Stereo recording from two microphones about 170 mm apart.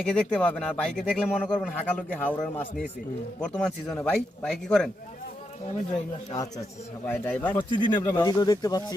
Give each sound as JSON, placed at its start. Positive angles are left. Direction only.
{"t": 0.0, "sound": "speech", "side_deg": 5}
{"t": 5.9, "sound": "speech", "side_deg": 20}
{"t": 7.0, "sound": "speech", "side_deg": 10}
{"t": 7.5, "sound": "speech", "side_deg": 25}